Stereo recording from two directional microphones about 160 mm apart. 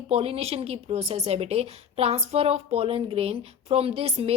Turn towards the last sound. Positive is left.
turn(degrees=-35)  # may be behind; listen again after turning